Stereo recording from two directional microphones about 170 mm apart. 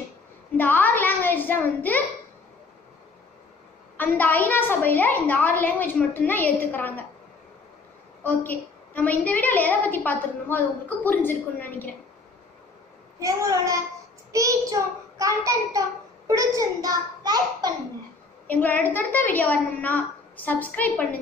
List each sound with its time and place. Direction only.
0.6 s a sound: 10° left (ahead or behind)
3.9 s a woman's voice: 10° left (ahead or behind)
8.2 s a woman's voice: 10° left (ahead or behind)
13.2 s a child's voice: 20° right (ahead or behind)
18.5 s a woman's voice: 10° left (ahead or behind)